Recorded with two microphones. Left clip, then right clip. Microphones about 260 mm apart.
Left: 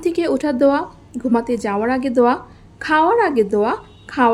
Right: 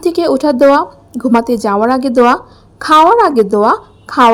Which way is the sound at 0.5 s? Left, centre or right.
Centre.